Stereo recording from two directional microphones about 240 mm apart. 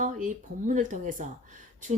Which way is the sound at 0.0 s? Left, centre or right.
Right.